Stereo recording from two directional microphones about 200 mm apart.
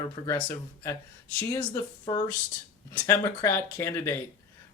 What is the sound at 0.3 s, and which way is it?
Speech, 15° left (ahead or behind).